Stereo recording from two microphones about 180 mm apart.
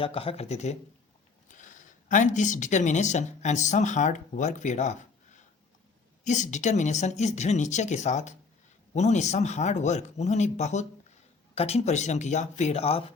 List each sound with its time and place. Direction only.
0.0 s speech: 30° left (ahead or behind)